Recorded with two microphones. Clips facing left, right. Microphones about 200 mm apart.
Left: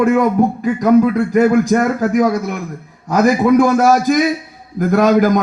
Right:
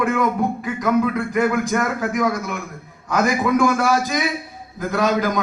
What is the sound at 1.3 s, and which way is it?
A man's voice, 35° left (ahead or behind).